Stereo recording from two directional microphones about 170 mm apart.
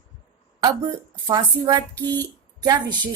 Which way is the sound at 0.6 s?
20° right (ahead or behind).